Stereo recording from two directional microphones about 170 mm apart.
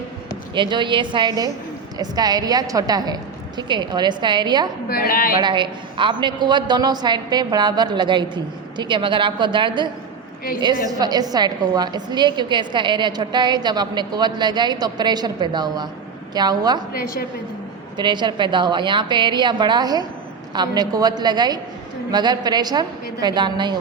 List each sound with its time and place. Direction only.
0.5 s a woman's voice: 30° right (ahead or behind)
4.9 s a woman's voice: 60° left (ahead or behind)
5.4 s a woman's voice: 25° right (ahead or behind)
17.9 s a woman's voice: 25° right (ahead or behind)